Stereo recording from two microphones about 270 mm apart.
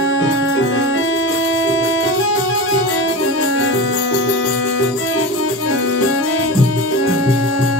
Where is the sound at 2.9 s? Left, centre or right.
Left.